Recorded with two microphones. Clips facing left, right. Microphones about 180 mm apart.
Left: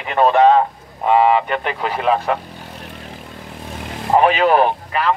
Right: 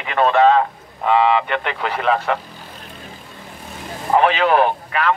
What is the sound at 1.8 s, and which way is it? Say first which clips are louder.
Speech: left 1 dB; 10° left (ahead or behind).